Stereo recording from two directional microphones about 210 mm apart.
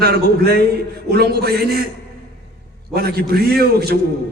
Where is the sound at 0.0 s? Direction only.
50° right (ahead or behind).